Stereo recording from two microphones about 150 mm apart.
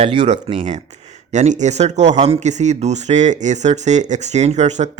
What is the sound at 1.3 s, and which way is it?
Speech, 50° right (ahead or behind).